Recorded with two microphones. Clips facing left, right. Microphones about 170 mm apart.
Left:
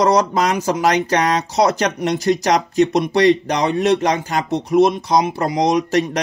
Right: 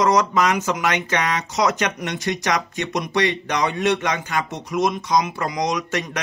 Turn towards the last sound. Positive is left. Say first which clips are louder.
# left 8 dB
turn(degrees=35)  # may be behind; listen again after turning